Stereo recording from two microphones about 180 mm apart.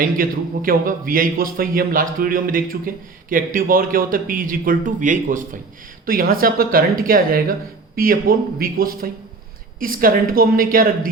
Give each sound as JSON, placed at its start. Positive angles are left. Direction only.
{"t": 0.0, "sound": "a man's voice", "side_deg": -50}